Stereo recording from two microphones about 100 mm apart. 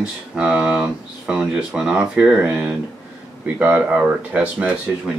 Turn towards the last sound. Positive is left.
turn(degrees=-15)  # may be behind; listen again after turning